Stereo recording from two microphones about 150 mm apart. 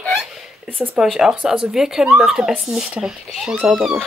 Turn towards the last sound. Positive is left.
turn(degrees=-5)  # may be behind; listen again after turning